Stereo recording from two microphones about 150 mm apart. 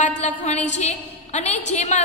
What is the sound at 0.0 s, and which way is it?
A woman's voice, 50° left (ahead or behind).